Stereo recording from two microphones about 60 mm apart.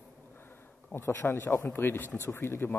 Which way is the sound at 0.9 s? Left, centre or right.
Left.